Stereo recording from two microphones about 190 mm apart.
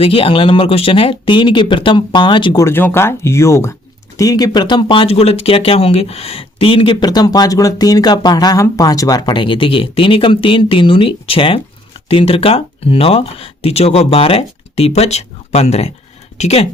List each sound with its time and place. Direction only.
0.0 s speech: 30° left (ahead or behind)